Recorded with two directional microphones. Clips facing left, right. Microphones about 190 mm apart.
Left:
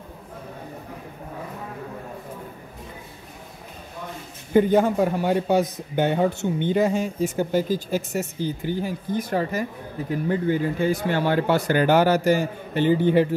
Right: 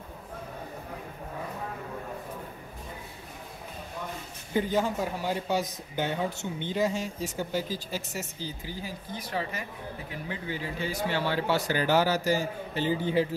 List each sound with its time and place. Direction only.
4.6 s speech: 55° left (ahead or behind)